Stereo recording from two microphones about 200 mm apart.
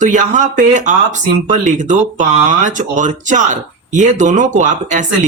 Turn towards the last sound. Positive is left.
turn(degrees=-35)  # may be behind; listen again after turning